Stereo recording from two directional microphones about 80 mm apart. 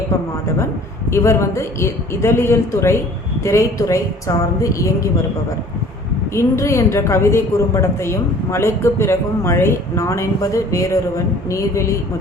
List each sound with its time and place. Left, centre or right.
1.1 s a woman's voice: left
6.3 s a woman's voice: left